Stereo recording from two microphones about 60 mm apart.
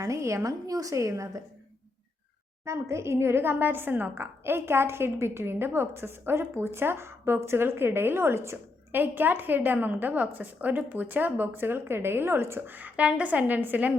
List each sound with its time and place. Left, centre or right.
0.0 s a woman's voice: right
2.6 s a woman's voice: right
8.9 s a woman's voice: right